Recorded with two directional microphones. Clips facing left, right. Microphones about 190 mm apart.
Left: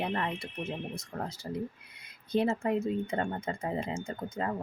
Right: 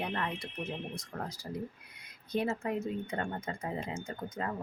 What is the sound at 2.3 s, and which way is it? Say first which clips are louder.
Speech: left 4 dB; 30° left (ahead or behind).